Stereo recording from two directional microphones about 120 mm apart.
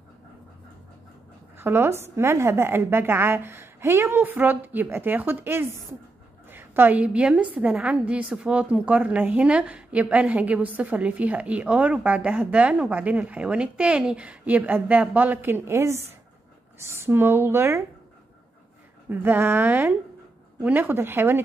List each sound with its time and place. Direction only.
1.6 s a woman's voice: 20° right (ahead or behind)
19.0 s a woman's voice: 15° right (ahead or behind)